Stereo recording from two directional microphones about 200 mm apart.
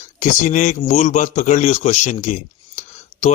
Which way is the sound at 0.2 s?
40° left (ahead or behind).